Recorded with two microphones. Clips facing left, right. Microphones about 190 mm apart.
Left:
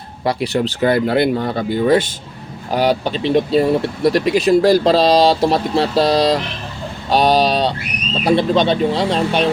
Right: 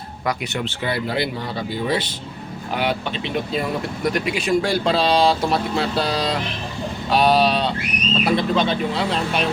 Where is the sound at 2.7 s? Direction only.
35° left (ahead or behind).